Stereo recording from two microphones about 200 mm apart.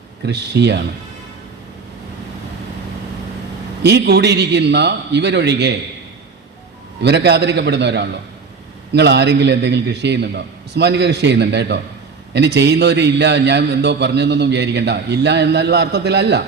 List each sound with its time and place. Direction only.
0.3 s a man's voice: 60° right (ahead or behind)
3.8 s a man's voice: 60° right (ahead or behind)
7.0 s a man's voice: 60° right (ahead or behind)